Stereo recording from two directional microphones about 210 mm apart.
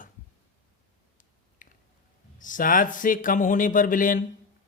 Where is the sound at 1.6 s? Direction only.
40° left (ahead or behind).